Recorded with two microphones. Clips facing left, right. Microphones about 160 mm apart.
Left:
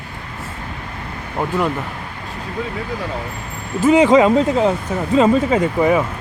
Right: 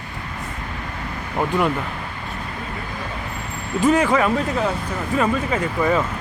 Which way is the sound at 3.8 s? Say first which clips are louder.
Left 6 dB; 15° left (ahead or behind).